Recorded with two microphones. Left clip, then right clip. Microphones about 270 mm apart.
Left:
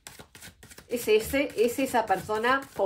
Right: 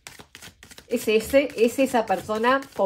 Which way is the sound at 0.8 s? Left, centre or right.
Centre.